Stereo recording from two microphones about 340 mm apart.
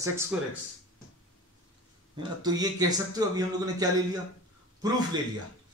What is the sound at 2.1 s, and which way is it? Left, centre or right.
A man's voice, centre.